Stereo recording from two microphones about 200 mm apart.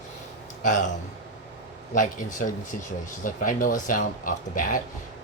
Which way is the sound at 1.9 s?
40° left (ahead or behind).